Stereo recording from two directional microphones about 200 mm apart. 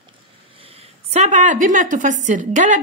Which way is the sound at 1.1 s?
35° right (ahead or behind).